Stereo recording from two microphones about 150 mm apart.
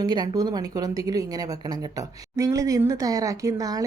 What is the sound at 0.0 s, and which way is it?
A woman's voice, 30° right (ahead or behind).